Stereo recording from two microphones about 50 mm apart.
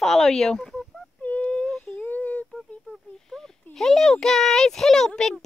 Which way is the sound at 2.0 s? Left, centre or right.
Left.